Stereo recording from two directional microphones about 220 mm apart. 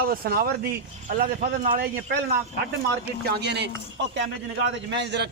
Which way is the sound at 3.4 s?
50° right (ahead or behind).